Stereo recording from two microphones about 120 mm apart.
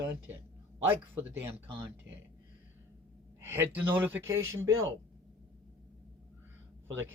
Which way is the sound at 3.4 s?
20° right (ahead or behind).